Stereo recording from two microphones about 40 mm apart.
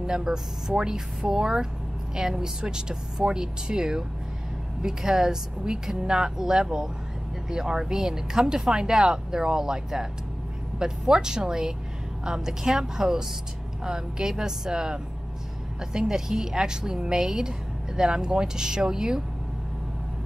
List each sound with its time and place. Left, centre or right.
0.0 s a woman's voice: centre